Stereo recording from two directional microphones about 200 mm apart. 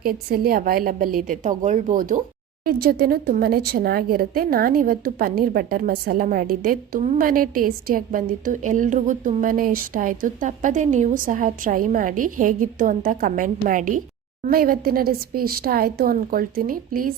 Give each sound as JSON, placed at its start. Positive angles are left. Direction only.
{"t": 0.0, "sound": "speech", "side_deg": -50}